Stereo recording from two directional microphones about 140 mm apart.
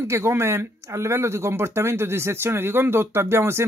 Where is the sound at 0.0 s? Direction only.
20° right (ahead or behind).